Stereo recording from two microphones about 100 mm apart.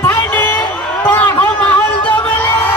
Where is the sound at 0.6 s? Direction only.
15° left (ahead or behind).